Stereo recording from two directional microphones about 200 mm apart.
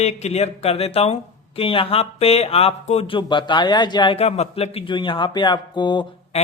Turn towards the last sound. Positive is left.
turn(degrees=25)  # may be behind; listen again after turning